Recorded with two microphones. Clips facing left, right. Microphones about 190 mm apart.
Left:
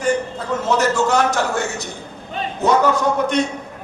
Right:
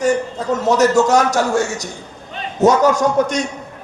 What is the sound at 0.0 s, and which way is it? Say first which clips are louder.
A man's voice: right 3 dB; 40° right (ahead or behind).